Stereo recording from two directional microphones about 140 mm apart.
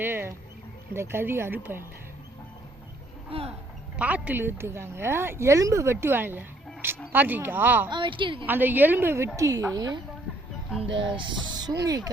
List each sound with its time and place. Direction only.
0.0 s a woman's voice: 15° right (ahead or behind)
3.2 s speech: 45° right (ahead or behind)
3.9 s a woman's voice: 10° right (ahead or behind)
7.9 s a woman's voice: 35° right (ahead or behind)
8.4 s a woman's voice: 15° right (ahead or behind)